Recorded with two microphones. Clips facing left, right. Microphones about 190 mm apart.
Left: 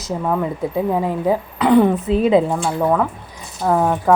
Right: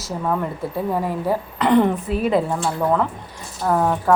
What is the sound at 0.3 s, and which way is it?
Speech, 10° left (ahead or behind).